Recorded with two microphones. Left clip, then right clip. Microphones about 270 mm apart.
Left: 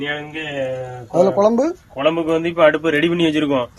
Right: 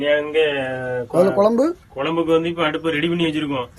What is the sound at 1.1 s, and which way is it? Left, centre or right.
Speech, centre.